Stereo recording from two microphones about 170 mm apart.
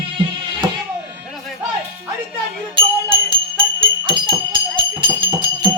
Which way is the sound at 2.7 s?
30° right (ahead or behind).